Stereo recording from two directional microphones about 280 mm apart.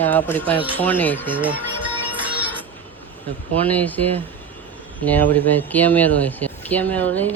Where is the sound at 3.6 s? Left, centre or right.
Centre.